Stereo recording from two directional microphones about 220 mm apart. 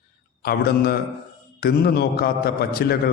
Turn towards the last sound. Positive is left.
turn(degrees=45)  # may be behind; listen again after turning